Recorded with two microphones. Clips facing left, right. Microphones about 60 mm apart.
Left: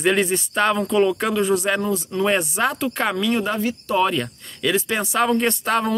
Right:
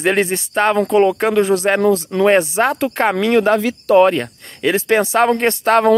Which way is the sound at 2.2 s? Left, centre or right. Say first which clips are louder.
Right 7 dB; right.